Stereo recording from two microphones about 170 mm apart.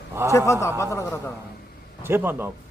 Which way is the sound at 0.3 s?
15° left (ahead or behind).